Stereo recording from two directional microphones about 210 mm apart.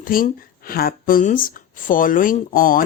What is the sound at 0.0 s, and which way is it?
Speech, 40° left (ahead or behind).